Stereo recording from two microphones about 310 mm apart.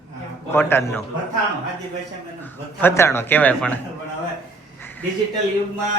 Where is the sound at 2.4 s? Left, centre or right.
Centre.